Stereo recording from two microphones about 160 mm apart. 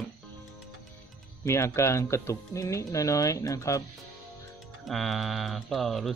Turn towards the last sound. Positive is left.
turn(degrees=0)  # may be behind; listen again after turning